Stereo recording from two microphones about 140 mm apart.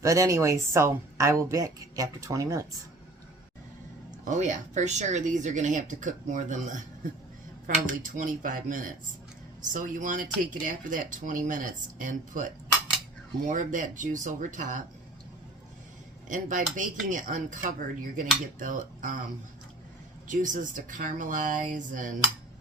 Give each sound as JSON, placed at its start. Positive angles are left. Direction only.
{"t": 0.0, "sound": "speech", "side_deg": -20}
{"t": 4.3, "sound": "speech", "side_deg": -60}
{"t": 7.9, "sound": "cutlery", "side_deg": -70}
{"t": 13.5, "sound": "speech", "side_deg": -65}
{"t": 16.3, "sound": "cutlery", "side_deg": -65}
{"t": 20.2, "sound": "cutlery", "side_deg": -65}